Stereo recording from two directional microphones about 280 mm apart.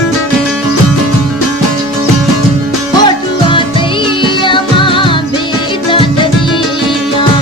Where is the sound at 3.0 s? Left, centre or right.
Centre.